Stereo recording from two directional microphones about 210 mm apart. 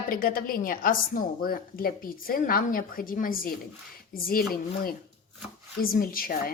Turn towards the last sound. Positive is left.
turn(degrees=45)  # may be behind; listen again after turning